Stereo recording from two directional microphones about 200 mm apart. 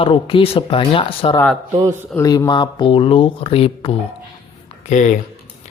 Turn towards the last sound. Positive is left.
turn(degrees=40)  # may be behind; listen again after turning